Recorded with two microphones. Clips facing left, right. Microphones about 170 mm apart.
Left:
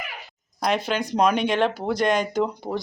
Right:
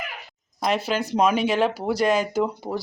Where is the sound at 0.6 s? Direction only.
5° right (ahead or behind).